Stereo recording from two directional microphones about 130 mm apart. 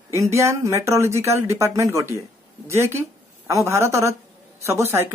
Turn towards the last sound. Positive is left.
turn(degrees=-20)  # may be behind; listen again after turning